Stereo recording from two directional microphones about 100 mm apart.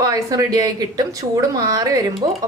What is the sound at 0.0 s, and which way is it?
A woman's voice, 35° right (ahead or behind).